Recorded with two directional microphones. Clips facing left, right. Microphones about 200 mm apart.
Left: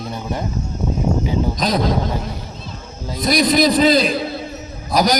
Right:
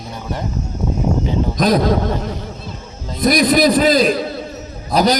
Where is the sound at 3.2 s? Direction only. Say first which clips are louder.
Right 2 dB; 50° right (ahead or behind).